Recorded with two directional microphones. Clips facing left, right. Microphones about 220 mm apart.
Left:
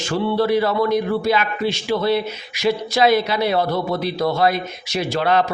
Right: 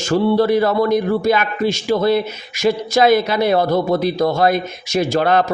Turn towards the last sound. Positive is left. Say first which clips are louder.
# right 3 dB
turn(degrees=-45)  # may be behind; listen again after turning